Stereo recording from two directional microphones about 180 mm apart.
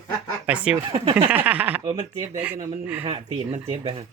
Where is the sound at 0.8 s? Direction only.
30° right (ahead or behind).